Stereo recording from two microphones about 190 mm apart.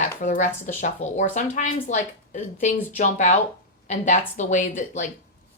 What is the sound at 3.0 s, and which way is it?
Speech, 40° left (ahead or behind).